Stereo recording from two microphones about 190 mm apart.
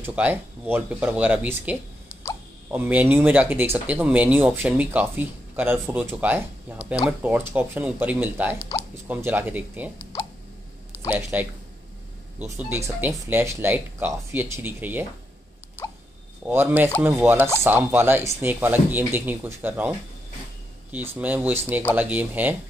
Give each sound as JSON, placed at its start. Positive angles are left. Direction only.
{"t": 0.0, "sound": "speech", "side_deg": -10}
{"t": 11.1, "sound": "speech", "side_deg": -10}
{"t": 16.4, "sound": "speech", "side_deg": -10}
{"t": 20.9, "sound": "speech", "side_deg": -10}